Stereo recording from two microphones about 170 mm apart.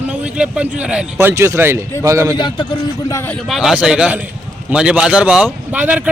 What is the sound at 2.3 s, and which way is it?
Speech, 25° left (ahead or behind).